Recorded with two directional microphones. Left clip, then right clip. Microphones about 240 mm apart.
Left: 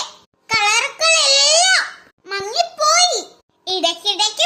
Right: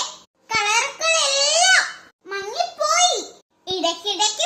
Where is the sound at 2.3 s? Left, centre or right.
Left.